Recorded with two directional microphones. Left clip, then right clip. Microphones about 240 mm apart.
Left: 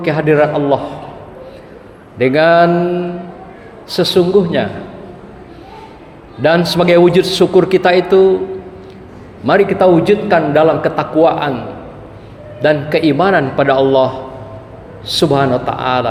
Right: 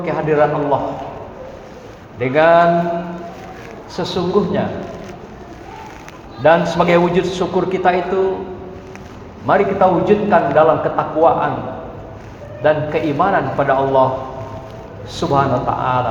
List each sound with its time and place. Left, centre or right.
0.0 s a man's voice: left
2.1 s a man's voice: left
3.9 s a man's voice: left
6.4 s a man's voice: left
9.5 s a man's voice: left
12.6 s a man's voice: left
15.1 s a man's voice: left